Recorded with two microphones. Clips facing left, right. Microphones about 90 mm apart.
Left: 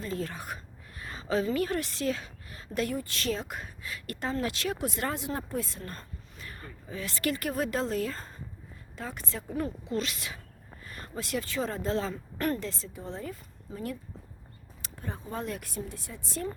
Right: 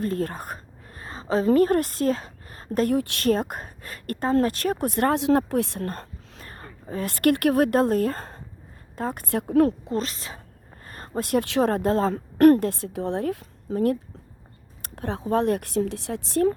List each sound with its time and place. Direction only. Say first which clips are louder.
0.0 s a sound: right 8 dB; 55° right (ahead or behind); by 1.5 s 35° right (ahead or behind)
1.5 s a woman's voice: right 10 dB; 45° right (ahead or behind)
2.9 s speech: right 10 dB; 65° right (ahead or behind)
6.4 s a woman's voice: right 3 dB; 40° right (ahead or behind); by 9.7 s 70° right (ahead or behind)
9.8 s a woman's voice: right 4 dB; 40° right (ahead or behind)
10.8 s a sound: right 9 dB; 40° right (ahead or behind)
11.4 s a woman's voice: right 10 dB; 70° right (ahead or behind)
14.8 s a sound: right 5 dB; 50° right (ahead or behind)
15.0 s speech: right 13 dB; 80° right